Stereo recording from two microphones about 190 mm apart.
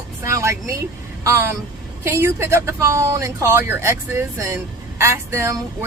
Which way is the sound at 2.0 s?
15° right (ahead or behind).